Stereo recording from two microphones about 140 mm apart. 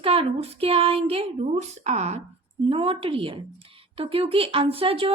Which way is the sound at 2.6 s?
40° right (ahead or behind).